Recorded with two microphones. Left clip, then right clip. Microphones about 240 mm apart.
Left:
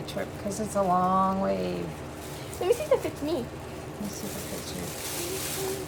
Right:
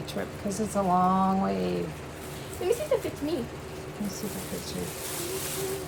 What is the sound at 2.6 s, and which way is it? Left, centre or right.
Speech, left.